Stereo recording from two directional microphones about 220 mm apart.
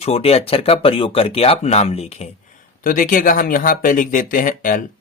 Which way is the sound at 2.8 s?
40° left (ahead or behind).